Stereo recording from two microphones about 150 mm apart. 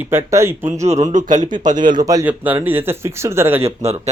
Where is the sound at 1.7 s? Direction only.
30° right (ahead or behind).